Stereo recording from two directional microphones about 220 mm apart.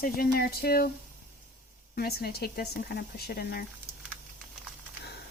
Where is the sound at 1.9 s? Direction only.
45° left (ahead or behind).